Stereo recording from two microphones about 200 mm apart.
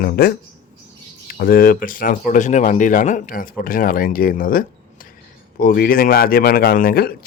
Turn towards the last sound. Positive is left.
turn(degrees=50)  # may be behind; listen again after turning